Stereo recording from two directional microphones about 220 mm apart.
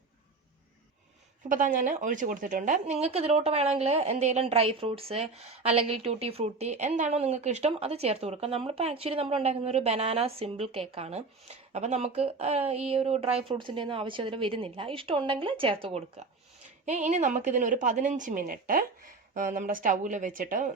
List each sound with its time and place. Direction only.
1.5 s a woman's voice: 35° right (ahead or behind)